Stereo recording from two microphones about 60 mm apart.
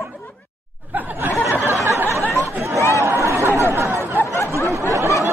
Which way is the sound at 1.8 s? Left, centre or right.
Right.